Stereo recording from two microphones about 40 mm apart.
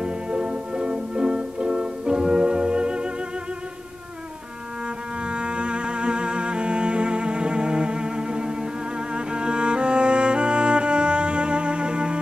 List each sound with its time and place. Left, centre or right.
0.0 s music: right
5.2 s music: right